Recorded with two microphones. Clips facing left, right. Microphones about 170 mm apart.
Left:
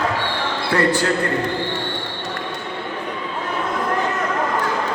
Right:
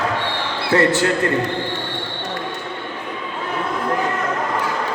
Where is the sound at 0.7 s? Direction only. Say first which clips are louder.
Right 3 dB; 25° right (ahead or behind).